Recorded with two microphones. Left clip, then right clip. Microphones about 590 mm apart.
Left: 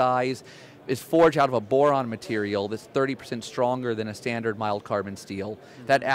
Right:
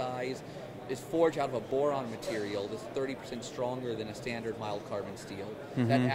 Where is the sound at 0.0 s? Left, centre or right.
Left.